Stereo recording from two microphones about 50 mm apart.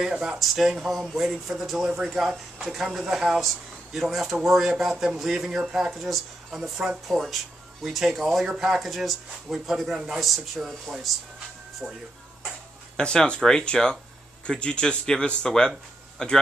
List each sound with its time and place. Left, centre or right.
0.1 s speech: centre
11.8 s speech: centre
12.9 s speech: centre